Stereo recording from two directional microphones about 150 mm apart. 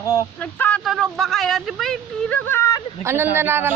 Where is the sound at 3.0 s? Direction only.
15° right (ahead or behind).